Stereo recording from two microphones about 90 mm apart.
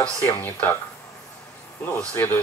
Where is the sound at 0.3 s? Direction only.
20° left (ahead or behind).